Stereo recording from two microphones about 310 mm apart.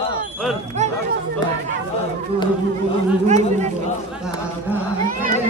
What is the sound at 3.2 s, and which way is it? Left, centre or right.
Speech, right.